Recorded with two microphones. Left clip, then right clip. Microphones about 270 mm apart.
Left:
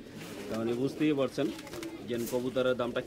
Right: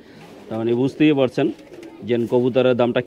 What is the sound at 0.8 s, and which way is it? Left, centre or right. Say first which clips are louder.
Speech: right 12 dB; right.